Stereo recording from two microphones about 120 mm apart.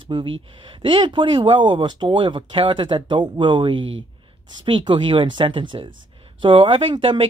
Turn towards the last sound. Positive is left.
turn(degrees=-45)  # may be behind; listen again after turning